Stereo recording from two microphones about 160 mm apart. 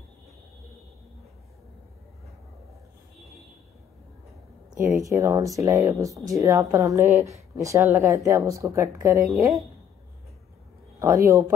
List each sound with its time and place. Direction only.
5.0 s speech: 20° right (ahead or behind)
11.0 s speech: 20° right (ahead or behind)